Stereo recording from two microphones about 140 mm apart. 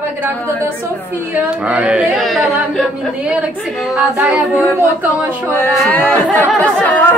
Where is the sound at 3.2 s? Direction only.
10° right (ahead or behind).